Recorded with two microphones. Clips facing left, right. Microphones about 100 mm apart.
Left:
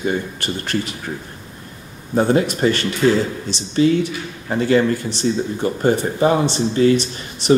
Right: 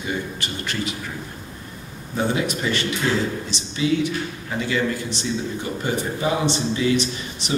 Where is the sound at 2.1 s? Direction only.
40° left (ahead or behind).